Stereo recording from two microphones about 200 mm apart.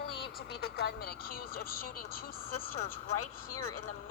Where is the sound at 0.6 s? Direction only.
50° left (ahead or behind).